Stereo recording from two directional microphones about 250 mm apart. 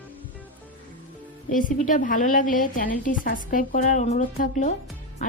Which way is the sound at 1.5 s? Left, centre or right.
Left.